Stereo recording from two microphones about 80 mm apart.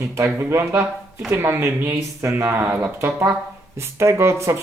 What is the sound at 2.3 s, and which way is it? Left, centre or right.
Speech, right.